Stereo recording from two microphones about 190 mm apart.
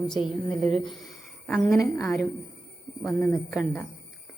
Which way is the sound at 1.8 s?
15° left (ahead or behind).